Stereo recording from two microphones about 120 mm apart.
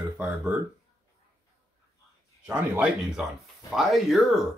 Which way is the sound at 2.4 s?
15° right (ahead or behind).